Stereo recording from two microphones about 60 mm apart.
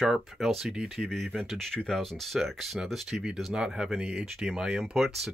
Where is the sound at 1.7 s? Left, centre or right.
Centre.